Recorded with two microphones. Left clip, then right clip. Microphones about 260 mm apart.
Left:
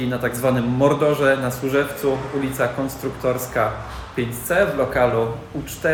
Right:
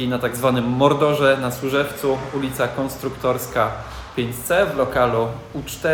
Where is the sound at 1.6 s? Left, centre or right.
Centre.